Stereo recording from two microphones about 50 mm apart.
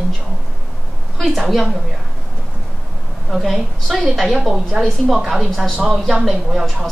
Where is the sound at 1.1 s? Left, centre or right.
Centre.